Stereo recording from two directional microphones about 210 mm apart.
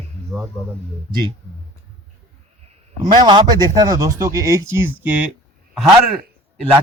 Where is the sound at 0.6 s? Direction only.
Centre (ahead or behind).